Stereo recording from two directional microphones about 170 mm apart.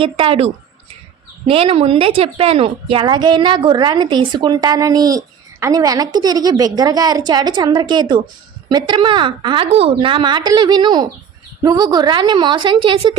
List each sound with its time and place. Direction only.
0.0 s a woman's voice: 30° right (ahead or behind)